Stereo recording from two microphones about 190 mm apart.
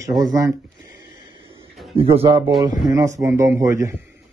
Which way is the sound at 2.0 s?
30° right (ahead or behind).